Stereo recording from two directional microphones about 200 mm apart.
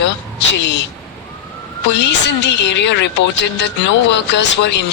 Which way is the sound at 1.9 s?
60° left (ahead or behind).